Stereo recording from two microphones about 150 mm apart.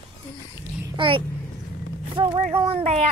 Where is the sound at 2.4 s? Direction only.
45° right (ahead or behind).